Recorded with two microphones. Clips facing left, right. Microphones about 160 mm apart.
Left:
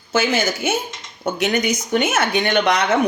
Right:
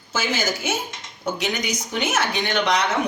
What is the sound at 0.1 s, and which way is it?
Speech, 60° left (ahead or behind).